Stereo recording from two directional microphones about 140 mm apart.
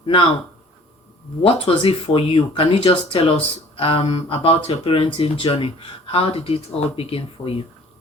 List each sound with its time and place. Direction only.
0.0 s speech: 40° left (ahead or behind)
1.4 s speech: 40° left (ahead or behind)